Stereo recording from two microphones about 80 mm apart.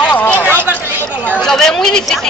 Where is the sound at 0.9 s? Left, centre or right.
Centre.